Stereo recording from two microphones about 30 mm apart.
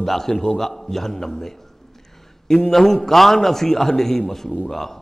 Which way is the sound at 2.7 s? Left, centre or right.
Centre.